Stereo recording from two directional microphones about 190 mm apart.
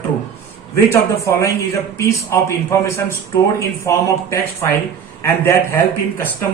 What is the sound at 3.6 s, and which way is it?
A man's voice, 15° left (ahead or behind).